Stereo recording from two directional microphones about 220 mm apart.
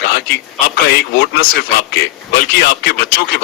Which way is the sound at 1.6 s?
45° left (ahead or behind).